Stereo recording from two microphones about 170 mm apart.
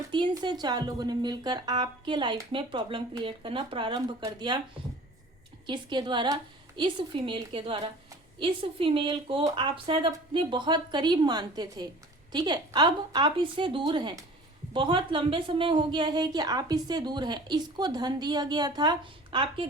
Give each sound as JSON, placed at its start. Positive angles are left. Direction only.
{"t": 0.1, "sound": "a woman's voice", "side_deg": -25}
{"t": 5.6, "sound": "a woman's voice", "side_deg": -25}